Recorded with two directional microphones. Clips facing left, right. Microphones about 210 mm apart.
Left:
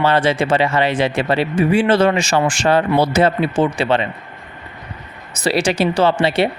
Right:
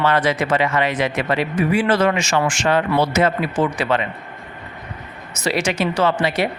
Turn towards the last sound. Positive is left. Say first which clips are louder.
# left 3 dB
turn(degrees=30)  # may be behind; listen again after turning